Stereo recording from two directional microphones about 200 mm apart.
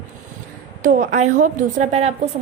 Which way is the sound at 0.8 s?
40° right (ahead or behind).